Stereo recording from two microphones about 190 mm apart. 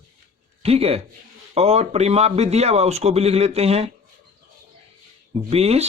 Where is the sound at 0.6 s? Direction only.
30° right (ahead or behind).